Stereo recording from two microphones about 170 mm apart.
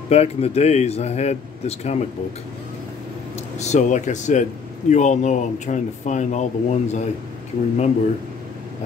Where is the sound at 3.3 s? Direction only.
40° left (ahead or behind).